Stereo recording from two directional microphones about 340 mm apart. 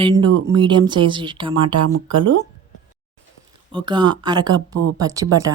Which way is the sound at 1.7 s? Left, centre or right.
Right.